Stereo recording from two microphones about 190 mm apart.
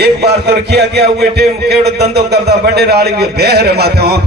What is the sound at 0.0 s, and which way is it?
A man's voice, 60° right (ahead or behind).